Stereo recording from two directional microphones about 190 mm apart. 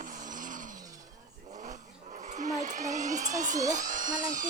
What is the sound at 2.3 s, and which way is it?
Speech, 40° right (ahead or behind).